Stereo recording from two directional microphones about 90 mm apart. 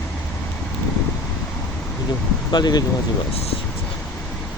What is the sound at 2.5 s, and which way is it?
Speech, 50° left (ahead or behind).